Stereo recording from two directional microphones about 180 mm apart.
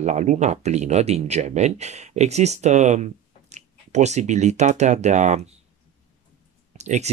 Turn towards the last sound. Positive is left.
turn(degrees=-40)  # may be behind; listen again after turning